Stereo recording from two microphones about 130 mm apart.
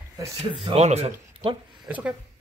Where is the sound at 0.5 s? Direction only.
40° right (ahead or behind).